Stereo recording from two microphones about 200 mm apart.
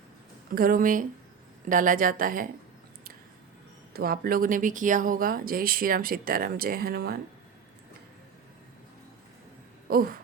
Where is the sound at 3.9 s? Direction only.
45° right (ahead or behind).